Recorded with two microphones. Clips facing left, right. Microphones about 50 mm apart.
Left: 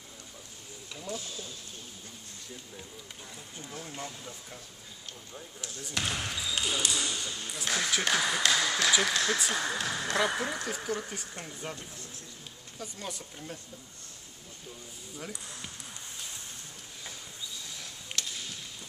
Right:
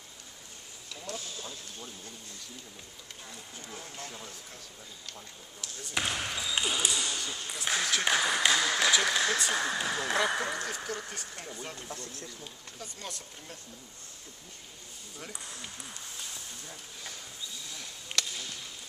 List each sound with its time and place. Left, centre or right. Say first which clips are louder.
1.1 s speech: left 2 dB; right
3.6 s speech: left 3 dB; centre
5.9 s speech: right 1 dB; centre
6.7 s speech: even; centre
10.7 s speech: left 3 dB; centre
12.8 s speech: left 3 dB; centre
18.2 s a sound: right 4 dB; right